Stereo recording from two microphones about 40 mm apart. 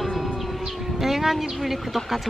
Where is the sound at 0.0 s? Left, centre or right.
Centre.